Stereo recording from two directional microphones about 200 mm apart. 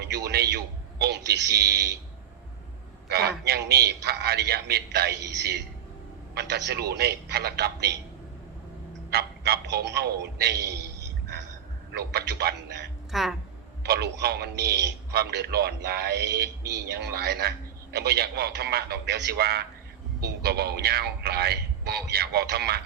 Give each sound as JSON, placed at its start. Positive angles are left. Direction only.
{"t": 0.0, "sound": "a sound", "side_deg": -55}
{"t": 3.1, "sound": "a man's voice", "side_deg": -50}
{"t": 9.0, "sound": "a man's voice", "side_deg": -55}
{"t": 11.9, "sound": "a man's voice", "side_deg": -55}
{"t": 13.1, "sound": "speech", "side_deg": 0}
{"t": 13.8, "sound": "a man's voice", "side_deg": -55}